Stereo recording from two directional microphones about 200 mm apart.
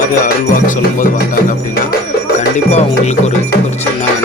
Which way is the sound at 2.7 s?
35° left (ahead or behind).